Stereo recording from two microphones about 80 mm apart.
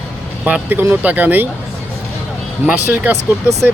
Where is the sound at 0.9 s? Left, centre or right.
Right.